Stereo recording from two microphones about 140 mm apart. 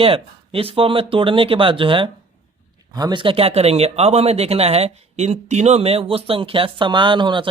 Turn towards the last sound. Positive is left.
turn(degrees=-35)  # may be behind; listen again after turning